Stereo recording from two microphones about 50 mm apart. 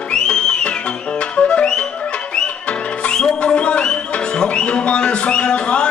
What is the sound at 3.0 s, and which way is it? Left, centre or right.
Music, centre.